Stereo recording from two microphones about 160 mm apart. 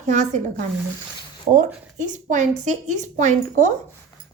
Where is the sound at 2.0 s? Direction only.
50° right (ahead or behind).